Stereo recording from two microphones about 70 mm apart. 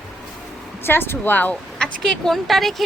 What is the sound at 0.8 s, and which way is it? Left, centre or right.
Speech, left.